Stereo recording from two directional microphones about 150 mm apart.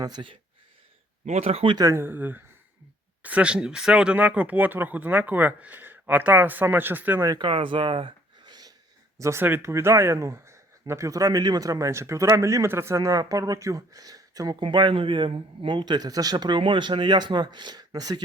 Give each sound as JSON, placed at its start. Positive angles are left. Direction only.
{"t": 0.0, "sound": "speech", "side_deg": -30}
{"t": 1.2, "sound": "speech", "side_deg": -45}
{"t": 1.7, "sound": "speech", "side_deg": -20}
{"t": 7.3, "sound": "speech", "side_deg": -30}